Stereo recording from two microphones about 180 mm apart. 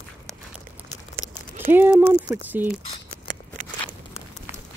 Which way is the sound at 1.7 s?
10° right (ahead or behind).